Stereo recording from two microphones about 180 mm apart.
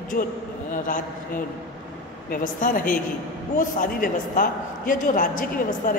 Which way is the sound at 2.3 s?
50° left (ahead or behind).